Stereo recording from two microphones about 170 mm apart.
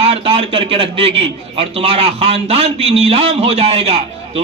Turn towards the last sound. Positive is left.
turn(degrees=-35)  # may be behind; listen again after turning